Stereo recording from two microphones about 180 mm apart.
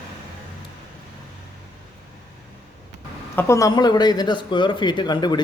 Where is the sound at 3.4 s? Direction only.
15° left (ahead or behind).